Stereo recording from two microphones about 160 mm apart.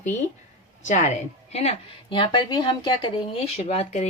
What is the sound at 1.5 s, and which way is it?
A woman's voice, 35° left (ahead or behind).